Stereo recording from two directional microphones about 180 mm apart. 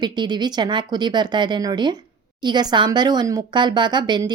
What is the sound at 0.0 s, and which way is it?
Speech, 25° right (ahead or behind).